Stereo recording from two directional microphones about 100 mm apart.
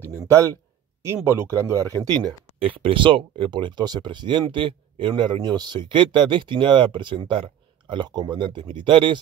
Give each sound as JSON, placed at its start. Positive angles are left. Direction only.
{"t": 0.0, "sound": "speech", "side_deg": -25}
{"t": 2.6, "sound": "speech", "side_deg": -60}